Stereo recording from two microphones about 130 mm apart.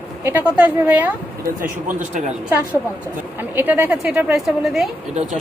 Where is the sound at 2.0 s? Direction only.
70° right (ahead or behind).